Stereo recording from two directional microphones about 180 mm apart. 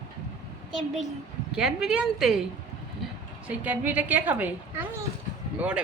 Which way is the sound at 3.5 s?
10° right (ahead or behind).